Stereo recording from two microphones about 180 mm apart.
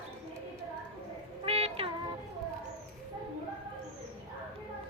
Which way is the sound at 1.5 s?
30° right (ahead or behind).